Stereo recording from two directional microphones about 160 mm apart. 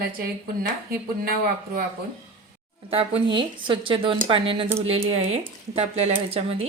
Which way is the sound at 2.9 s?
35° right (ahead or behind).